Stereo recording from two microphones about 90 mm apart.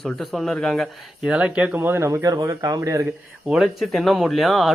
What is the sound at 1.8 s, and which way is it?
Speech, 25° right (ahead or behind).